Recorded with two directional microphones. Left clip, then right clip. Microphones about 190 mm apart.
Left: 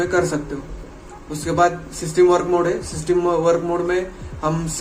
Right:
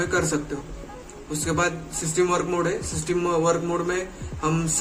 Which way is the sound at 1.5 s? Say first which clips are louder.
Left 8 dB; 20° left (ahead or behind).